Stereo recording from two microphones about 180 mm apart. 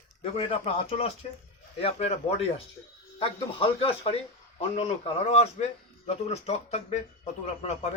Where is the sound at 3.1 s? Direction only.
30° left (ahead or behind).